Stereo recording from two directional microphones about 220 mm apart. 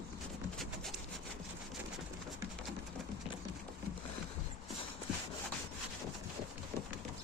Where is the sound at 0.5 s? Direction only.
Centre (ahead or behind).